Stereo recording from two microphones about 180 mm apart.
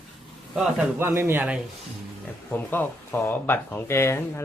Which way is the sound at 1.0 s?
15° right (ahead or behind).